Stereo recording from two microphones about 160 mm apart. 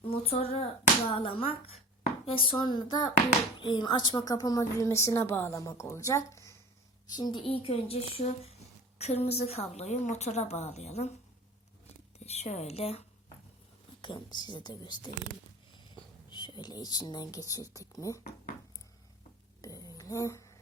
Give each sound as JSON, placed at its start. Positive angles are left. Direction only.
{"t": 0.1, "sound": "a woman's voice", "side_deg": 40}
{"t": 12.2, "sound": "a woman's voice", "side_deg": 40}
{"t": 16.3, "sound": "a woman's voice", "side_deg": 30}
{"t": 19.6, "sound": "a sound", "side_deg": 20}